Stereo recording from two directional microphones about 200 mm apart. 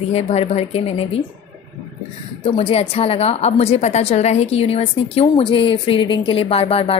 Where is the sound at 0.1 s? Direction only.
30° left (ahead or behind).